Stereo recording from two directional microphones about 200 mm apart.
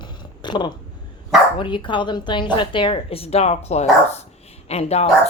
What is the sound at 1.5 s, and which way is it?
Speech, 25° left (ahead or behind).